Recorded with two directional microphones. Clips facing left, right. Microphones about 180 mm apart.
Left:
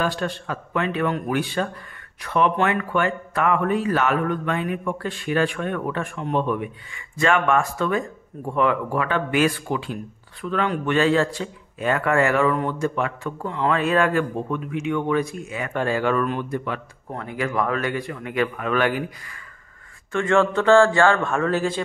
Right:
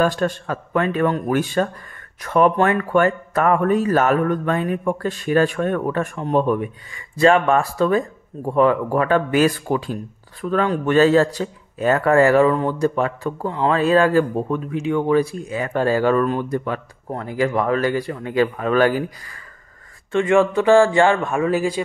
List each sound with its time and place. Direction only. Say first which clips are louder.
0.0 s a man's voice: right 6 dB; 45° right (ahead or behind)
20.1 s speech: right 3 dB; 15° right (ahead or behind)